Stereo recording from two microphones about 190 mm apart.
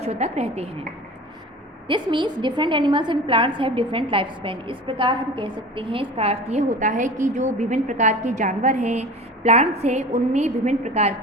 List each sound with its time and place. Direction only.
0.0 s a woman's voice: 35° right (ahead or behind)
1.9 s a woman's voice: 25° right (ahead or behind)